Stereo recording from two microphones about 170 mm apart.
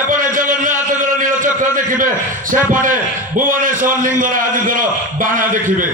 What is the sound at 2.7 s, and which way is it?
A man's voice, 50° right (ahead or behind).